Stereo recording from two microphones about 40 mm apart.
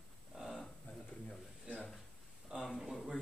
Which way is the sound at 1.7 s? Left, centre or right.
Centre.